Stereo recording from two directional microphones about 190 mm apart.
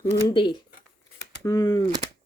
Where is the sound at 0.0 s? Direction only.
20° left (ahead or behind).